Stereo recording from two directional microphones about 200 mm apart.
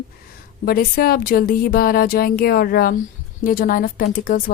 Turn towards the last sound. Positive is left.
turn(degrees=45)  # may be behind; listen again after turning